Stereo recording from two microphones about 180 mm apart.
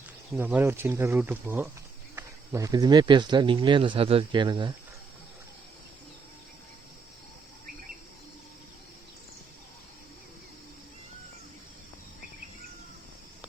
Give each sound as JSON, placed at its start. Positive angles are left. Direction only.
{"t": 0.3, "sound": "speech", "side_deg": -10}